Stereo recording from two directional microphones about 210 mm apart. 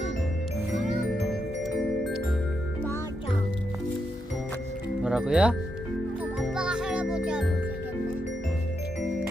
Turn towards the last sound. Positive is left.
turn(degrees=-5)  # may be behind; listen again after turning